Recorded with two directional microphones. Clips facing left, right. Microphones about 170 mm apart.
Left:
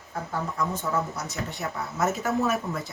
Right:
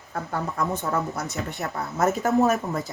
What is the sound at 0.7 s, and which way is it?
Speech, 55° right (ahead or behind).